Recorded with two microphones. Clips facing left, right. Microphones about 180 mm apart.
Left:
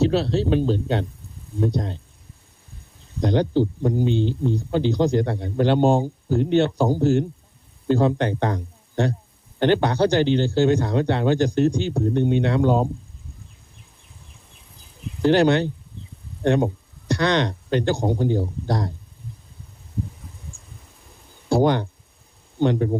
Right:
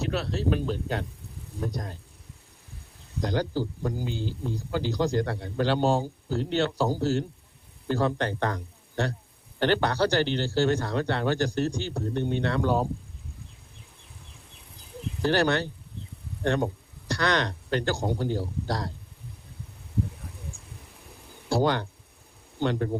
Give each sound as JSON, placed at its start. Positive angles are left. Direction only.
{"t": 0.0, "sound": "speech", "side_deg": 30}
{"t": 3.2, "sound": "speech", "side_deg": 20}
{"t": 15.2, "sound": "speech", "side_deg": 20}
{"t": 21.5, "sound": "speech", "side_deg": 20}